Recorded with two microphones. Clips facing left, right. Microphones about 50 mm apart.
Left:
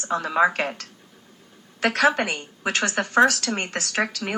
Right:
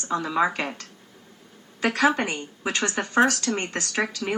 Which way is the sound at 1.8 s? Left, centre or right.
Left.